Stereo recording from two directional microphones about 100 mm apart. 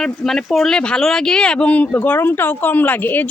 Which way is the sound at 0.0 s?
5° left (ahead or behind).